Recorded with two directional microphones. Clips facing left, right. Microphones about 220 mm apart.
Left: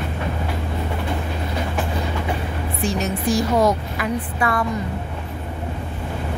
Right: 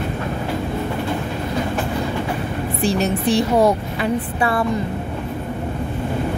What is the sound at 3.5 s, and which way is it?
Speech, 30° right (ahead or behind).